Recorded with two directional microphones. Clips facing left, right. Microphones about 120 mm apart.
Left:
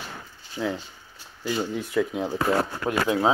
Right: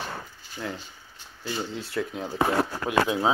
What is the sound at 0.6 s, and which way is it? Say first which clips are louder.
Speech: left 6 dB; 10° left (ahead or behind).